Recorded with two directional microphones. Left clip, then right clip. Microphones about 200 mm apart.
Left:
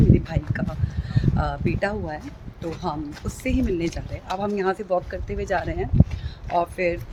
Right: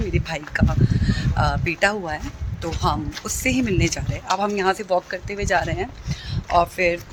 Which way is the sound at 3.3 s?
5° right (ahead or behind).